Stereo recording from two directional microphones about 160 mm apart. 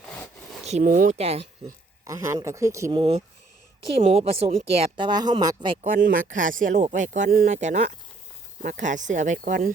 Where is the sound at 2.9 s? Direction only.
35° right (ahead or behind).